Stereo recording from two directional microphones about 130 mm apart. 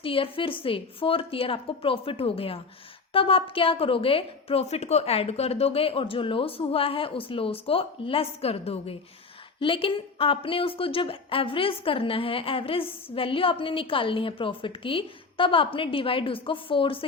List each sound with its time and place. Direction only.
0.0 s a woman's voice: 45° left (ahead or behind)